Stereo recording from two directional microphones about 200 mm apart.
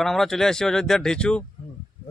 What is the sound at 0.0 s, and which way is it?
Speech, centre (ahead or behind).